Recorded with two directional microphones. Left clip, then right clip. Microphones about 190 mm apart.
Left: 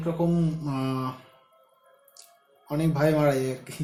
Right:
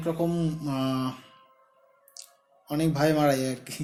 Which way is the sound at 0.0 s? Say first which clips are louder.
Left 1 dB; 35° right (ahead or behind).